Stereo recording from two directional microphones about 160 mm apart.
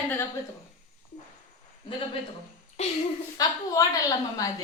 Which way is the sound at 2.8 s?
40° left (ahead or behind).